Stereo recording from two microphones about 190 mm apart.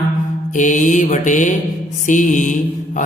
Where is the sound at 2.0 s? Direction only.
40° left (ahead or behind).